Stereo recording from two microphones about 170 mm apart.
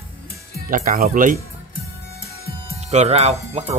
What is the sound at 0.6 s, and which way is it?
Speech, 55° right (ahead or behind).